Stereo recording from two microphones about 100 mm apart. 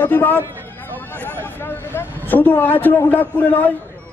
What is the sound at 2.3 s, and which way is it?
A man's voice, 20° left (ahead or behind).